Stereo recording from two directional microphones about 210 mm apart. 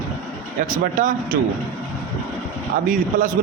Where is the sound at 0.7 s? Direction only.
40° right (ahead or behind).